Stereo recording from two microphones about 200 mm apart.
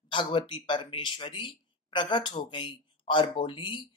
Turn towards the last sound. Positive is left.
turn(degrees=25)  # may be behind; listen again after turning